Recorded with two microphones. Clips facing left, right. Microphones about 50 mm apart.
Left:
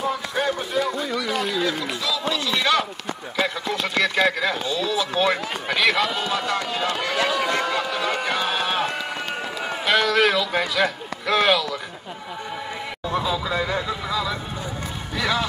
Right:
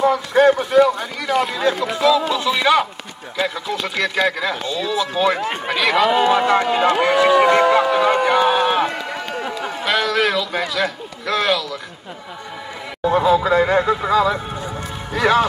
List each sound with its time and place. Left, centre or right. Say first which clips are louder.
0.0 s speech: right 10 dB; right
2.5 s speech: right 5 dB; centre
3.3 s speech: right 2 dB; centre
6.0 s speech: right 10 dB; right; by 9.0 s centre
9.8 s speech: even; centre
13.0 s speech: right 10 dB; right